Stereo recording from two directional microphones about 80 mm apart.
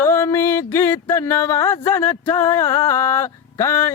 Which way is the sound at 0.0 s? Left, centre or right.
Left.